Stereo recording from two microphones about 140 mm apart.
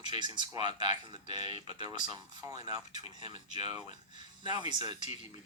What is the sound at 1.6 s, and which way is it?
Speech, 35° right (ahead or behind).